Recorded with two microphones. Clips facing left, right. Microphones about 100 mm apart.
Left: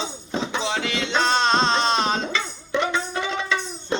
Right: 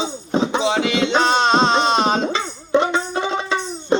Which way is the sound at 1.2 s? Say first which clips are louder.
Right 2 dB; 5° right (ahead or behind).